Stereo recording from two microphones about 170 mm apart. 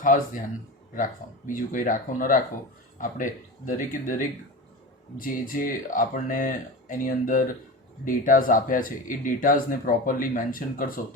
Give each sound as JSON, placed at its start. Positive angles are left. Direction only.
{"t": 0.9, "sound": "speech", "side_deg": 50}